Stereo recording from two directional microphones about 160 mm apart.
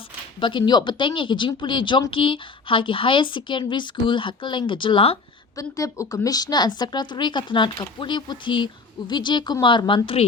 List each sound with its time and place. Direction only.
0.3 s speech: 30° left (ahead or behind)
5.5 s a woman's voice: 20° left (ahead or behind)